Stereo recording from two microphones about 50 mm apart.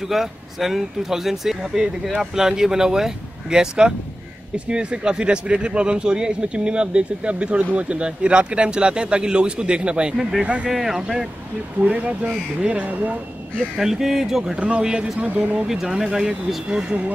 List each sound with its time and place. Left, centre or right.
0.1 s speech: centre; by 10.7 s right
10.7 s speech: centre
11.8 s speech: right
13.7 s speech: centre
15.1 s speech: right
15.6 s speech: centre
16.6 s speech: right